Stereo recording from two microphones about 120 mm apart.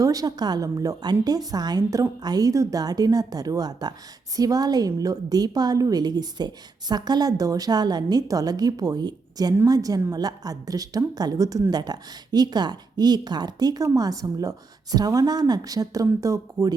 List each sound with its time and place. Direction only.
0.0 s a woman's voice: 30° right (ahead or behind)